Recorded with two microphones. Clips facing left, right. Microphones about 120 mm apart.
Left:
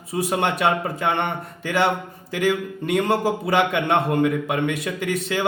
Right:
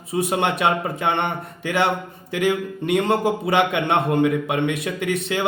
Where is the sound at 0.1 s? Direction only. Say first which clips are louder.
Right 1 dB; 25° right (ahead or behind).